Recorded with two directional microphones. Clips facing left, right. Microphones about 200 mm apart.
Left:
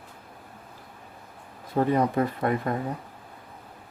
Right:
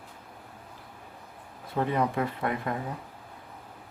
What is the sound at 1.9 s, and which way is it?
Speech, 40° left (ahead or behind).